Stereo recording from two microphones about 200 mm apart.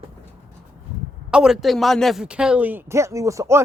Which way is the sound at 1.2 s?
5° right (ahead or behind).